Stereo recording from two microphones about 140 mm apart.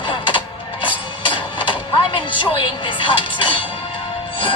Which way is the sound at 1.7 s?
35° left (ahead or behind).